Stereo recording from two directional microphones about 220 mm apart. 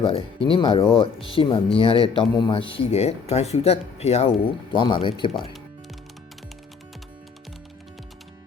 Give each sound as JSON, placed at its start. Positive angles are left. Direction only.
{"t": 0.0, "sound": "speech", "side_deg": 25}